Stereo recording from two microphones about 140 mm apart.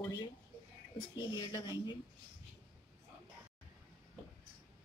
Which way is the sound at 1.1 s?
30° left (ahead or behind).